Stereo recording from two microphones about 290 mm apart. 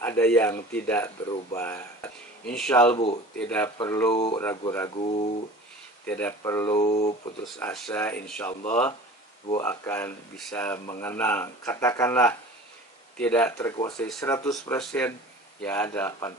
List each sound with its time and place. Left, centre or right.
0.0 s speech: centre
6.0 s speech: centre
7.5 s speech: centre